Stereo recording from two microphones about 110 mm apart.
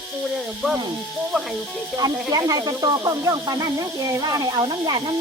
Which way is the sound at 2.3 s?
35° right (ahead or behind).